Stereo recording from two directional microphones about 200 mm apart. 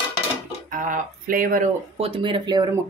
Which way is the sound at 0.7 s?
40° right (ahead or behind).